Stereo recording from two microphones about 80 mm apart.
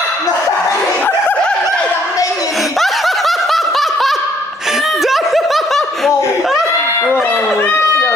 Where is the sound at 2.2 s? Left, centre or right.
Left.